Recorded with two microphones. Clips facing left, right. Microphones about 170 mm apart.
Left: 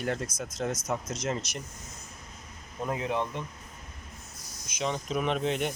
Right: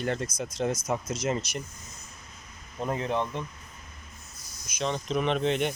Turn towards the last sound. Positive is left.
turn(degrees=5)  # may be behind; listen again after turning